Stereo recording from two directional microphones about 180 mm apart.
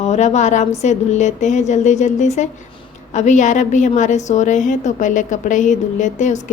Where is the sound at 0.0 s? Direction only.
40° left (ahead or behind).